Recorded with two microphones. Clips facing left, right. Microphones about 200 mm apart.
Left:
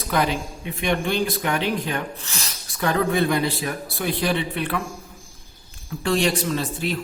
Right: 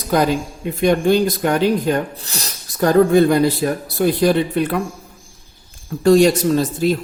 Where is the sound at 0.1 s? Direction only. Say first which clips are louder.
Right 6 dB; 40° right (ahead or behind).